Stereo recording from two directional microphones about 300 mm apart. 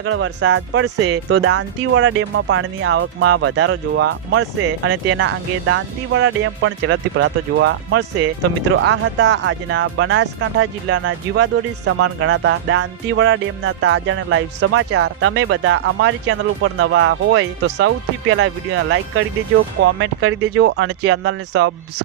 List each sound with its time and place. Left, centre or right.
0.0 s speech: right